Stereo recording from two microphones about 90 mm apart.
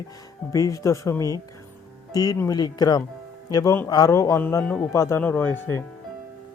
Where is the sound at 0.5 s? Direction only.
35° left (ahead or behind).